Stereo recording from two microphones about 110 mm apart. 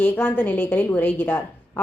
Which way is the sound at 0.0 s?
20° left (ahead or behind).